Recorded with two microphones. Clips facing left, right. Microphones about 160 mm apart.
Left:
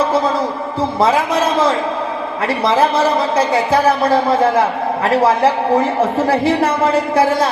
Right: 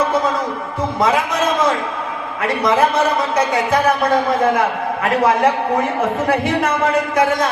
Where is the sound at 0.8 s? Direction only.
30° left (ahead or behind).